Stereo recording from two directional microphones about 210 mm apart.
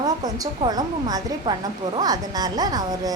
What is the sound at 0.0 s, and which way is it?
A woman's voice, 20° right (ahead or behind).